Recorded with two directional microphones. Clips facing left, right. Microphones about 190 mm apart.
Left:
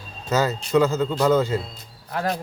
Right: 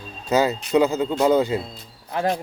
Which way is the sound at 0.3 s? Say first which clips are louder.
Right 2 dB; 15° right (ahead or behind).